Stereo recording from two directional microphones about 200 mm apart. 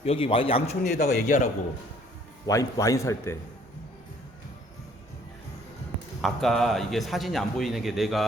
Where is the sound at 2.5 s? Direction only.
15° left (ahead or behind).